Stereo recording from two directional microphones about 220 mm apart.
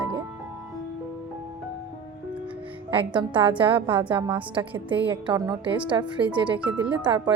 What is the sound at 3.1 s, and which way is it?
Speech, 20° right (ahead or behind).